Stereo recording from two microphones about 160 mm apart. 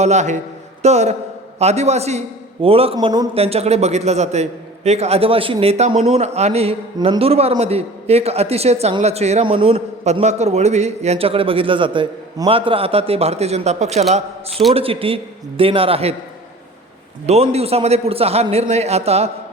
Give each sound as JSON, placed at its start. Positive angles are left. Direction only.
{"t": 0.0, "sound": "a man's voice", "side_deg": -45}
{"t": 3.3, "sound": "speech", "side_deg": -40}
{"t": 17.2, "sound": "speech", "side_deg": -40}